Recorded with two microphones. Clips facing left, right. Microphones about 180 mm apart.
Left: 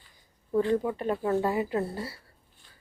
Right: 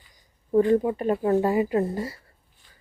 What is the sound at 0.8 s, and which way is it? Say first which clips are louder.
Speech: right 5 dB; 15° right (ahead or behind).